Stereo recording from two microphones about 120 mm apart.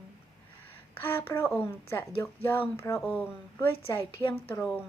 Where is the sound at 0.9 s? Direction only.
20° left (ahead or behind).